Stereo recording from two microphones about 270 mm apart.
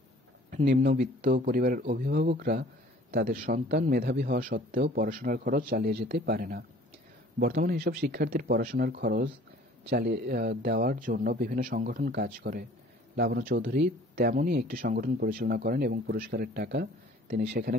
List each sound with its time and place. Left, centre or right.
0.7 s speech: right